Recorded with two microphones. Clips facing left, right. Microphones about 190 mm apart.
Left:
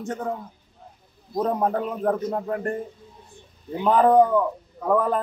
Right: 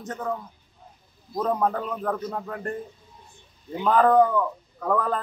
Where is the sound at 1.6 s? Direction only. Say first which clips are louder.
Left 2 dB; 50° left (ahead or behind).